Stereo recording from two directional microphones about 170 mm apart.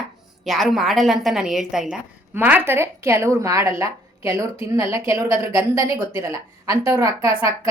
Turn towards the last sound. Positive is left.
turn(degrees=-15)  # may be behind; listen again after turning